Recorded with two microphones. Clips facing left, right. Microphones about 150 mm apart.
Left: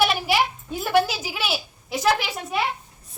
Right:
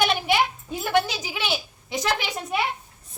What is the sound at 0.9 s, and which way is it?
A child's voice, 5° left (ahead or behind).